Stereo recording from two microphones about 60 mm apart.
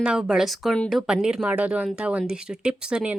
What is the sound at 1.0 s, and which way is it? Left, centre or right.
Speech, centre.